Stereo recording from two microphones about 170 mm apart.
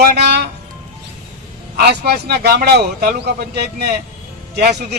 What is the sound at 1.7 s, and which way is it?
A man's voice, 70° right (ahead or behind).